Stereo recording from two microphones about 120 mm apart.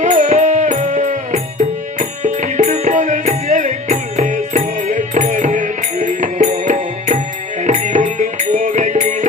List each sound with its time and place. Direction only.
0.0 s music: 90° right